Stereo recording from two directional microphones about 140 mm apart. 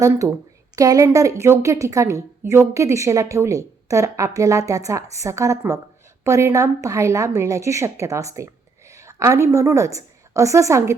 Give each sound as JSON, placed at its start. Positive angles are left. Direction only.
{"t": 0.8, "sound": "a woman's voice", "side_deg": -25}